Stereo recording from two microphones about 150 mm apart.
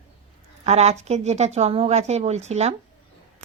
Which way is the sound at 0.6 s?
45° right (ahead or behind).